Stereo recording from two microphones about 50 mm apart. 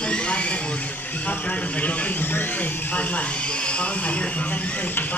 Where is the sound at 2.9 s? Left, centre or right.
Left.